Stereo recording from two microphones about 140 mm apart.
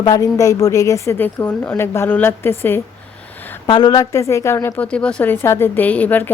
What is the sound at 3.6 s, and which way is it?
A woman's voice, 30° left (ahead or behind).